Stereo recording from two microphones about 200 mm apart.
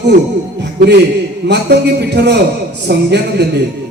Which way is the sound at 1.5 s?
55° right (ahead or behind).